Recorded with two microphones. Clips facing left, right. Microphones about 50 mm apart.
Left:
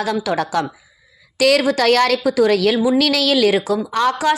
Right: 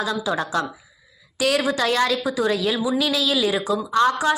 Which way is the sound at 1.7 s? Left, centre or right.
Left.